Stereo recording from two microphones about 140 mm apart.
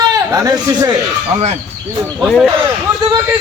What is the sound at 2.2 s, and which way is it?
Speech, centre (ahead or behind).